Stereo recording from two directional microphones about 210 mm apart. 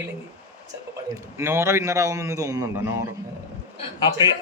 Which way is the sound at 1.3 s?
10° right (ahead or behind).